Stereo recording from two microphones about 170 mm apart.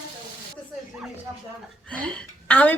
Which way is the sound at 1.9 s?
5° left (ahead or behind).